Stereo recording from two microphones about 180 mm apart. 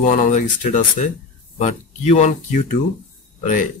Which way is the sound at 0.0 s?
40° left (ahead or behind).